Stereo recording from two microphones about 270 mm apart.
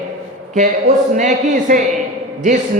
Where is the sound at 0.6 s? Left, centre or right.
Right.